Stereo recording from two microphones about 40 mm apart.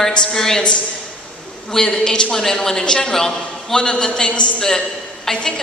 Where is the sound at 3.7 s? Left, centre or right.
Left.